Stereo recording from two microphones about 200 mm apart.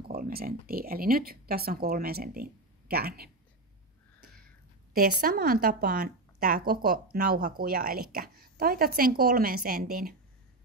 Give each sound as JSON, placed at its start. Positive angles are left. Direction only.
{"t": 0.1, "sound": "a woman's voice", "side_deg": -50}
{"t": 4.9, "sound": "a woman's voice", "side_deg": -50}